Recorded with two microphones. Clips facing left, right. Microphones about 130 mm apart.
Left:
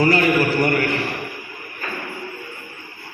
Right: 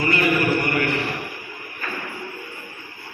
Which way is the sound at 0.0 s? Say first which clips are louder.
Left 5 dB; 40° left (ahead or behind).